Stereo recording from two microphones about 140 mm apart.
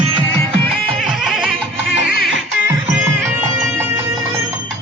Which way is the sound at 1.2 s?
5° right (ahead or behind).